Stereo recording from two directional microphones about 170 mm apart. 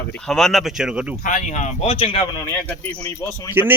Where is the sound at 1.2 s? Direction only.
50° left (ahead or behind); by 2.2 s 30° left (ahead or behind).